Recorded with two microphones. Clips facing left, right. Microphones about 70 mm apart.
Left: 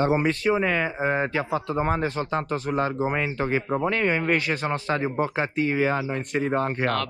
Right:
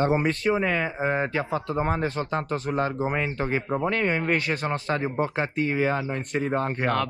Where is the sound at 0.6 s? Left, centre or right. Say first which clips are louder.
Left 1 dB; left.